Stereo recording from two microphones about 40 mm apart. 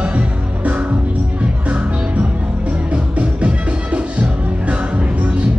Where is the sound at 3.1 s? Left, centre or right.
Right.